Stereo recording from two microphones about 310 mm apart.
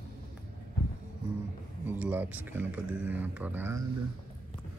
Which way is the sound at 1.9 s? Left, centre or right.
Centre.